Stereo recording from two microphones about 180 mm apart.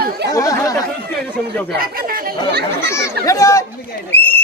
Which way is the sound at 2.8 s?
15° left (ahead or behind).